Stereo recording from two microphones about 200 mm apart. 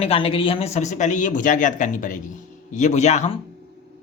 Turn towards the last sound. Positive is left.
turn(degrees=35)  # may be behind; listen again after turning